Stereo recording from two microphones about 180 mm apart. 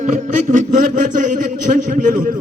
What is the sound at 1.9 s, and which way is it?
Speech, 45° right (ahead or behind).